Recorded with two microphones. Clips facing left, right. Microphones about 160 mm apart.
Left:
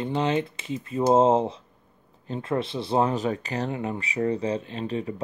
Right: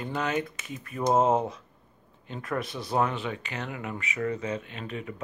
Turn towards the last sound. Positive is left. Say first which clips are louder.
# left 7 dB
turn(degrees=30)  # may be behind; listen again after turning